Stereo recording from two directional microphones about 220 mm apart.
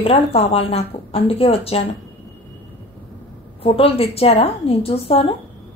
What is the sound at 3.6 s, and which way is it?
A woman's voice, 25° left (ahead or behind).